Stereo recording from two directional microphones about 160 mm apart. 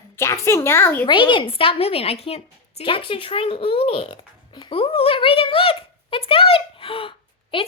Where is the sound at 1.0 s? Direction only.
30° left (ahead or behind).